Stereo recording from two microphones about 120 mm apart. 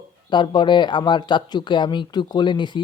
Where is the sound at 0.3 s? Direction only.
40° left (ahead or behind).